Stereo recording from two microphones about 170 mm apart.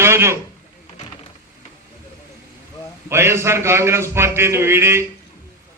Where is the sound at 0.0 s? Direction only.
15° right (ahead or behind).